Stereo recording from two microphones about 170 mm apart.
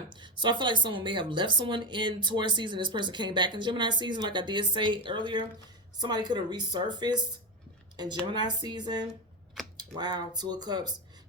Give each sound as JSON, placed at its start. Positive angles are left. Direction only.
{"t": 0.1, "sound": "speech", "side_deg": -30}
{"t": 8.3, "sound": "speech", "side_deg": -25}